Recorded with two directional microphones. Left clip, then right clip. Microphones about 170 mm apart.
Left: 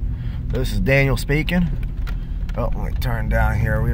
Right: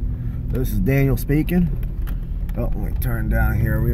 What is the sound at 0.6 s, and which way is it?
Speech, 10° left (ahead or behind).